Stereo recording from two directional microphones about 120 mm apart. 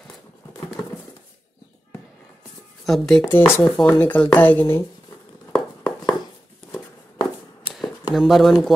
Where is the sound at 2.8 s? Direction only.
5° left (ahead or behind).